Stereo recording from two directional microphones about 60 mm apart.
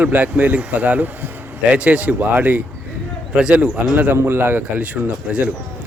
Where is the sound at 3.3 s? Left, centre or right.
Centre.